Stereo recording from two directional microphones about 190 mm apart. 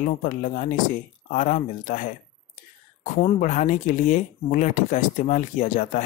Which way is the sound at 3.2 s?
40° left (ahead or behind).